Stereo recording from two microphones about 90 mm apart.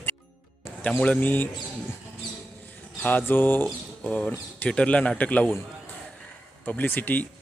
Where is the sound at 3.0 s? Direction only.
20° left (ahead or behind).